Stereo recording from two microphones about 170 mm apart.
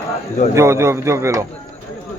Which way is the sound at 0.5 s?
15° right (ahead or behind).